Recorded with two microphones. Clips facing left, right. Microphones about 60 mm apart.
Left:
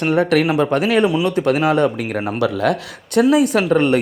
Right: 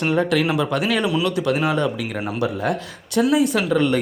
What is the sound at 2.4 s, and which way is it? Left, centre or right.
Speech, left.